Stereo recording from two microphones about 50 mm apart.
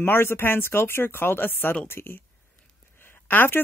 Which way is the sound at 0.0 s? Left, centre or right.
Left.